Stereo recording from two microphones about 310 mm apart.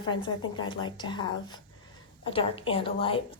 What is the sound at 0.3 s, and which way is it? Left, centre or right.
Speech, left.